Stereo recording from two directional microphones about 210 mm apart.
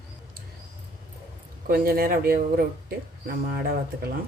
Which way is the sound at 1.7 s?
45° right (ahead or behind).